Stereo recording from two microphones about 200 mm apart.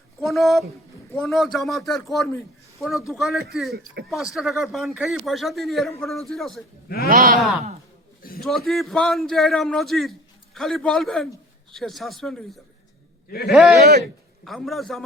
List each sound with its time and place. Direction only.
0.2 s a man's voice: centre (ahead or behind)
6.8 s a man's voice: 50° left (ahead or behind)
7.1 s speech: 45° right (ahead or behind)
8.2 s a sound: 50° left (ahead or behind)
8.4 s a man's voice: centre (ahead or behind)